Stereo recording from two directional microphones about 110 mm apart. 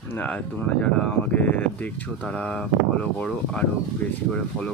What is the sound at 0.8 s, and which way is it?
Speech, 10° left (ahead or behind).